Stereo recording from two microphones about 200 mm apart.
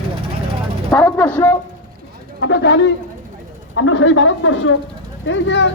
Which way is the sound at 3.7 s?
85° left.